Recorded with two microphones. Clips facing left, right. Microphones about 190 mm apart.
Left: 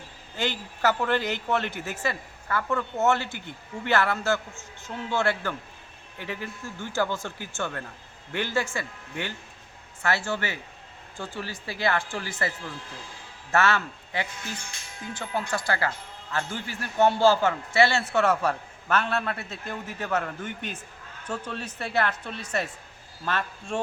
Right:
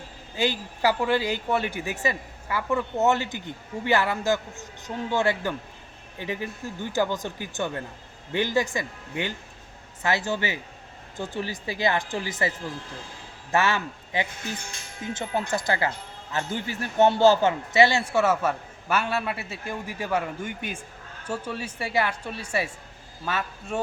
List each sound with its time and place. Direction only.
0.3 s a man's voice: 10° right (ahead or behind)